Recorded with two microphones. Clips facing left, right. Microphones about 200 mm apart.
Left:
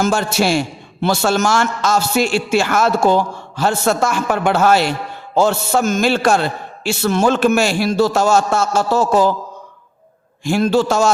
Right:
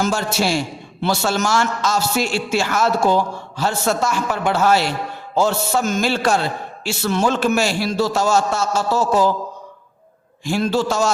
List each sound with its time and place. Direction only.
0.0 s a man's voice: 55° left (ahead or behind)
5.3 s music: 55° left (ahead or behind)
6.8 s a man's voice: 50° left (ahead or behind)
10.4 s music: 55° left (ahead or behind)